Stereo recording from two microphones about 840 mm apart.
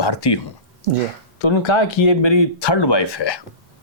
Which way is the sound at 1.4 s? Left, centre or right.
Left.